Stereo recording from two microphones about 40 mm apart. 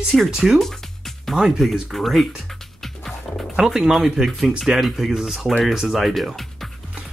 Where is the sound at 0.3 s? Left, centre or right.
Centre.